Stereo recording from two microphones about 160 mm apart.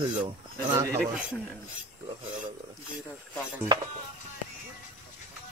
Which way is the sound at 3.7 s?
30° right (ahead or behind).